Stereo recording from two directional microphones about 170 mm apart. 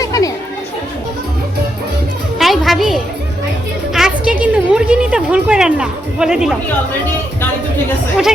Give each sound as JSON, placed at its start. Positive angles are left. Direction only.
{"t": 0.0, "sound": "chatter", "side_deg": 20}
{"t": 2.4, "sound": "music", "side_deg": 0}
{"t": 3.9, "sound": "a sound", "side_deg": -5}